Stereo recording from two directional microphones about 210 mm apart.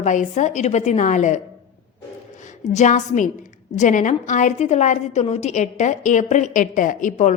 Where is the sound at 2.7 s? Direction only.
35° left (ahead or behind).